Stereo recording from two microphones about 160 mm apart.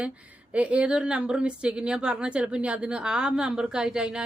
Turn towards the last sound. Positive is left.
turn(degrees=-5)  # may be behind; listen again after turning